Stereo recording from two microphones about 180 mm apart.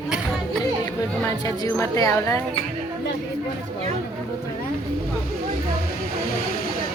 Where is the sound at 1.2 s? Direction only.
20° left (ahead or behind).